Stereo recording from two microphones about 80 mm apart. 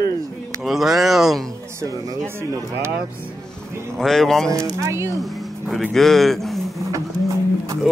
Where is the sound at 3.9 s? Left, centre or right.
Centre.